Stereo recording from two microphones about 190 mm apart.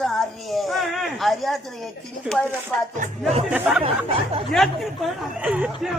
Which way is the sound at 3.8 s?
30° right (ahead or behind).